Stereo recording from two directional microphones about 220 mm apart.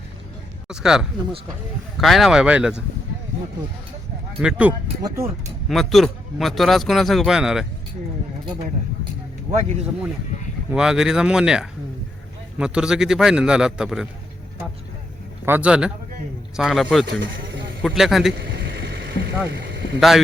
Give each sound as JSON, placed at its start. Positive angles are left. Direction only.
{"t": 0.7, "sound": "a man's voice", "side_deg": -5}
{"t": 4.4, "sound": "a man's voice", "side_deg": -5}
{"t": 9.5, "sound": "a man's voice", "side_deg": -5}
{"t": 15.4, "sound": "a man's voice", "side_deg": -5}
{"t": 18.5, "sound": "a sound", "side_deg": -45}
{"t": 20.0, "sound": "a man's voice", "side_deg": 0}